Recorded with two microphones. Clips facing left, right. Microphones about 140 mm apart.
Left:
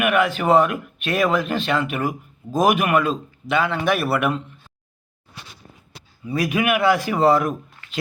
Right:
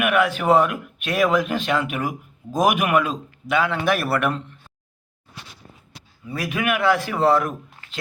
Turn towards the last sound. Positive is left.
turn(degrees=5)  # may be behind; listen again after turning